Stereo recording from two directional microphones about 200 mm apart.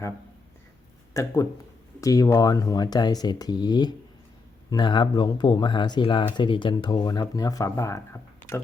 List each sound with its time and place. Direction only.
1.1 s speech: 15° left (ahead or behind)